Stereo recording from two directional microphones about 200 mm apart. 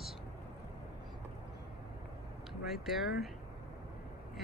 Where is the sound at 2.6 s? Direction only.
Centre (ahead or behind).